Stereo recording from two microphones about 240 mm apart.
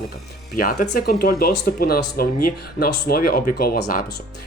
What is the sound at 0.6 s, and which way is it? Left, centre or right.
Speech, left.